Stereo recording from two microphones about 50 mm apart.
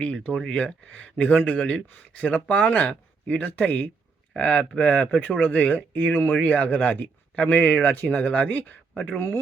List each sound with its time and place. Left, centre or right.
0.0 s speech: left
1.9 s speech: left
9.1 s speech: left